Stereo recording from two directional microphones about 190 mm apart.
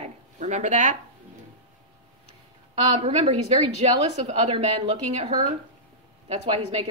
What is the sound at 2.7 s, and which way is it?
A woman's voice, 30° right (ahead or behind).